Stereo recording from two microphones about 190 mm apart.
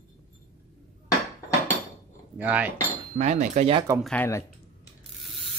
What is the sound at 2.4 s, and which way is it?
Cutlery, 10° right (ahead or behind).